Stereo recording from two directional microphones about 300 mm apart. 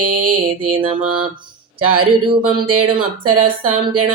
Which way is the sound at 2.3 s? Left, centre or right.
Centre.